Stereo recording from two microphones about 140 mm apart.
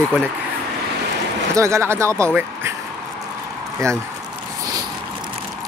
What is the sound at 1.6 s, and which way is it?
Speech, 20° right (ahead or behind).